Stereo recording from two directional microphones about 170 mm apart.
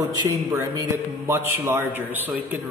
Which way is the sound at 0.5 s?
15° right (ahead or behind).